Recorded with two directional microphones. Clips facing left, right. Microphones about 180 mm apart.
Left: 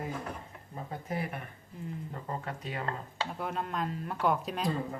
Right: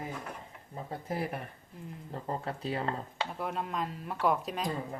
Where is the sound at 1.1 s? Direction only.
35° right (ahead or behind).